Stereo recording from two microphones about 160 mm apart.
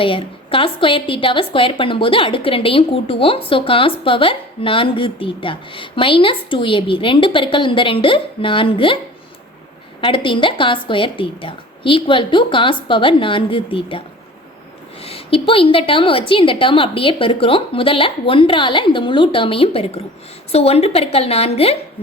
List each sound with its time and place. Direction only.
0.0 s a woman's voice: 35° left (ahead or behind)
10.0 s a woman's voice: 30° left (ahead or behind)
15.0 s a woman's voice: 35° left (ahead or behind)